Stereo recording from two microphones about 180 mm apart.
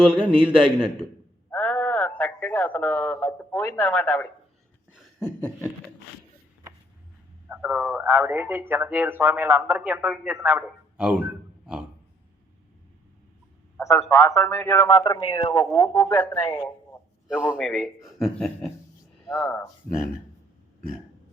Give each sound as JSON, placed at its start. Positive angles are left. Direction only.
{"t": 0.2, "sound": "speech", "side_deg": -5}
{"t": 1.5, "sound": "speech", "side_deg": 10}
{"t": 7.4, "sound": "speech", "side_deg": -10}
{"t": 13.7, "sound": "a man's voice", "side_deg": 15}
{"t": 14.8, "sound": "a man's voice", "side_deg": 25}
{"t": 16.0, "sound": "speech", "side_deg": 5}
{"t": 17.3, "sound": "a man's voice", "side_deg": -5}